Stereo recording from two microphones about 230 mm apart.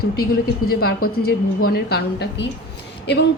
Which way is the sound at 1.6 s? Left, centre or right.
Left.